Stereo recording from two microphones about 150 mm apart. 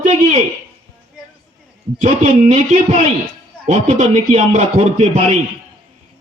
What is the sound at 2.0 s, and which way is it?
A man's voice, 55° right (ahead or behind).